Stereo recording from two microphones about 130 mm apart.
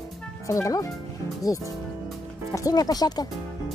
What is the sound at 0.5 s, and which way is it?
Speech, 25° left (ahead or behind).